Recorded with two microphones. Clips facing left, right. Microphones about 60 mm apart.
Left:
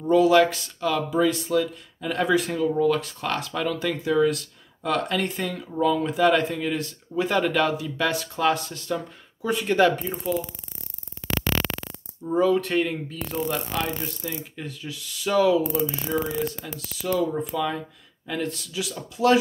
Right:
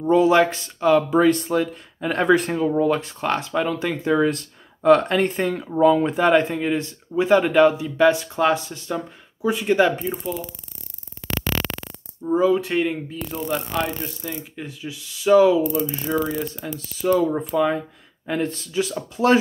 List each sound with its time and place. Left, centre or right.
0.0 s speech: right
1.1 s speech: right; by 10.0 s centre
10.3 s speech: centre
12.3 s speech: centre
13.3 s speech: centre
14.5 s speech: centre; by 19.3 s right